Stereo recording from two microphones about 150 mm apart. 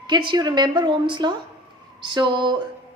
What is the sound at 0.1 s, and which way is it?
A woman's voice, 30° right (ahead or behind).